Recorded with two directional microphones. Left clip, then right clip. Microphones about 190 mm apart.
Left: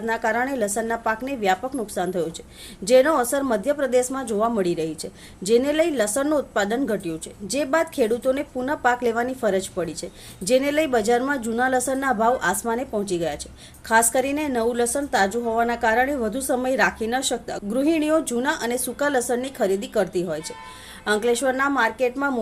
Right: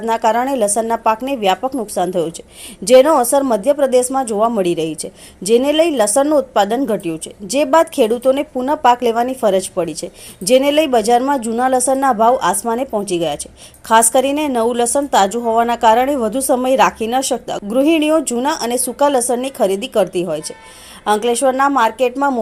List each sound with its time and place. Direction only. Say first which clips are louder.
0.0 s a woman's voice: right 8 dB; 25° right (ahead or behind)